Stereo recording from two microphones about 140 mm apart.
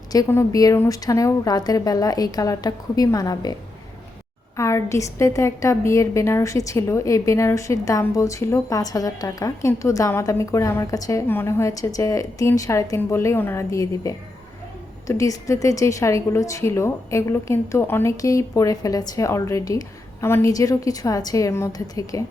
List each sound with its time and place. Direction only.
0.1 s a woman's voice: 25° left (ahead or behind)
4.5 s a woman's voice: 20° left (ahead or behind)